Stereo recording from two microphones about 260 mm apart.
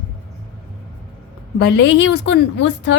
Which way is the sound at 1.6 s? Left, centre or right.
Left.